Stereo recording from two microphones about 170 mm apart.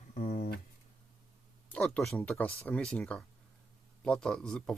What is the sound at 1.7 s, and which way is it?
Speech, 5° left (ahead or behind).